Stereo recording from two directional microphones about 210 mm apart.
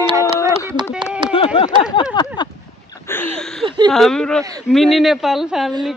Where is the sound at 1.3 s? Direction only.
25° left (ahead or behind).